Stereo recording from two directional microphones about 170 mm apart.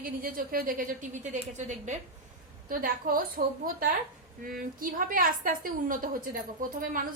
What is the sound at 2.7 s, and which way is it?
A woman's voice, 60° right (ahead or behind).